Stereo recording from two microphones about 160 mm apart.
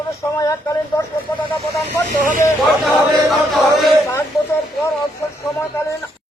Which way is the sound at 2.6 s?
Centre (ahead or behind).